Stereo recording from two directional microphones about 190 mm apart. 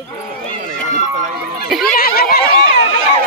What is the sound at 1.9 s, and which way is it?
Snicker, 55° left (ahead or behind).